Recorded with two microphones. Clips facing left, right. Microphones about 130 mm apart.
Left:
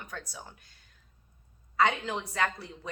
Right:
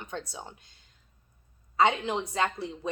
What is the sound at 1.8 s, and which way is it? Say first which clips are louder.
Speech: right 3 dB; 20° right (ahead or behind).